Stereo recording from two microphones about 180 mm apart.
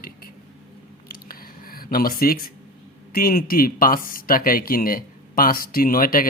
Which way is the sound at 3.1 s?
55° left (ahead or behind).